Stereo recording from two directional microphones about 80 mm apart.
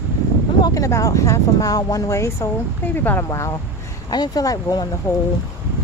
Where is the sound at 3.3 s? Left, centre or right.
Left.